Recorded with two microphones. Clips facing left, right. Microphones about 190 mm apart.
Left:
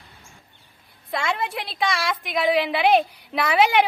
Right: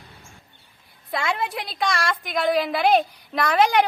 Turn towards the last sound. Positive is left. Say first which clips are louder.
# even
turn(degrees=5)  # may be behind; listen again after turning